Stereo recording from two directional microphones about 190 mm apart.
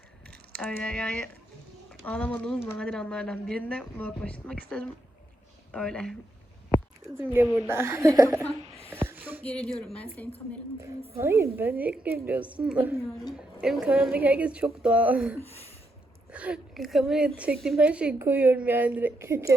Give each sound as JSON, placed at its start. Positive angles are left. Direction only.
{"t": 0.6, "sound": "speech", "side_deg": 10}
{"t": 7.3, "sound": "a woman's voice", "side_deg": -10}
{"t": 9.0, "sound": "a sound", "side_deg": -10}
{"t": 9.4, "sound": "speech", "side_deg": 5}
{"t": 11.2, "sound": "a woman's voice", "side_deg": -15}
{"t": 15.4, "sound": "speech", "side_deg": 35}
{"t": 16.3, "sound": "a woman's voice", "side_deg": -5}